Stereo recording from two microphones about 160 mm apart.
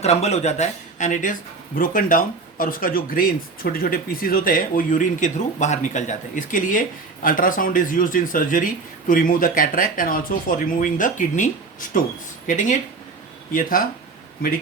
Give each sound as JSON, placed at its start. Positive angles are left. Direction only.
{"t": 0.0, "sound": "speech", "side_deg": 40}